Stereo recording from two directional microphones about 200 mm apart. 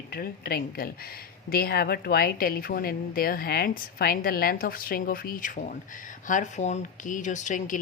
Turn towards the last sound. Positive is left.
turn(degrees=40)  # may be behind; listen again after turning